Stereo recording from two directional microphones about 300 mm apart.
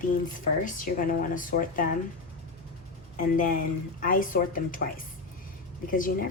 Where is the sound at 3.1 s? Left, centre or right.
Left.